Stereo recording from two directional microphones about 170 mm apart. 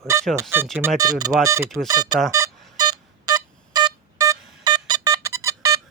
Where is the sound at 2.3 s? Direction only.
20° right (ahead or behind).